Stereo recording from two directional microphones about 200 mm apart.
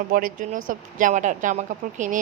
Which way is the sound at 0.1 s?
45° right (ahead or behind).